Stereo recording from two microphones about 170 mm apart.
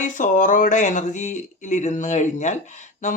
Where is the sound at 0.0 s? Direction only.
50° left (ahead or behind).